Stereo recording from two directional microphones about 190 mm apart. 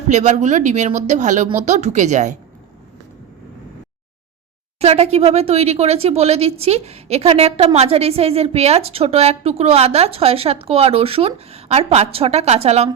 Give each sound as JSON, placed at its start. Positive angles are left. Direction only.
{"t": 0.1, "sound": "speech", "side_deg": -40}
{"t": 4.8, "sound": "speech", "side_deg": -35}